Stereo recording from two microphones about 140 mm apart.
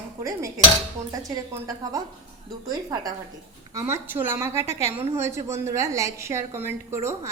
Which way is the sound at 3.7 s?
15° right (ahead or behind).